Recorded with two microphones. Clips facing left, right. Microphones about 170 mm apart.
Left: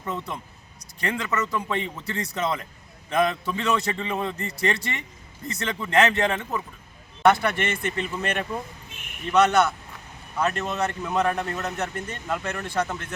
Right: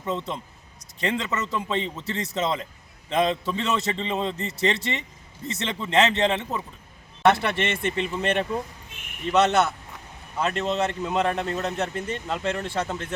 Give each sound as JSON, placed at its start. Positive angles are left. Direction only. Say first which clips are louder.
{"t": 0.0, "sound": "speech", "louder": "right 3 dB", "side_deg": -20}